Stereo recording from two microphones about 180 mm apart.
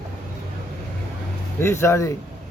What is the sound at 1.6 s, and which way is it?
Speech, 15° left (ahead or behind).